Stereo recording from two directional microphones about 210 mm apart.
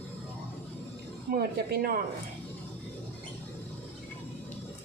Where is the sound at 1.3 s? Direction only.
45° right (ahead or behind).